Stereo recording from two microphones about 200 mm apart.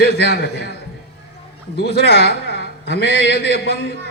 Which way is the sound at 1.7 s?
55° left (ahead or behind).